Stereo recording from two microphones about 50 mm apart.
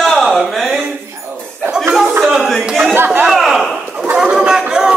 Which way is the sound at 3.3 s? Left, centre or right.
Centre.